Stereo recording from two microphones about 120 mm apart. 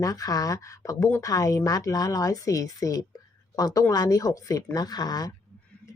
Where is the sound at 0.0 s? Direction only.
30° left (ahead or behind).